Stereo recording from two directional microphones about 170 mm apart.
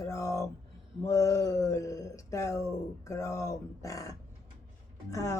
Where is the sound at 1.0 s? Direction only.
20° left (ahead or behind).